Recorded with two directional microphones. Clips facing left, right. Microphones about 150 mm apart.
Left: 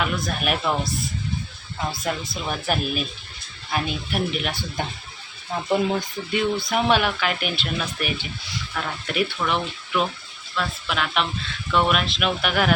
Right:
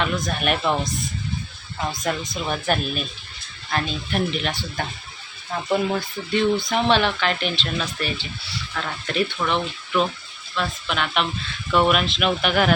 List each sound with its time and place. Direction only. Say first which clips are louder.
0.3 s speech: right 2 dB; centre (ahead or behind)
2.3 s speech: right 2 dB; 5° left (ahead or behind)
5.6 s speech: even; 15° left (ahead or behind)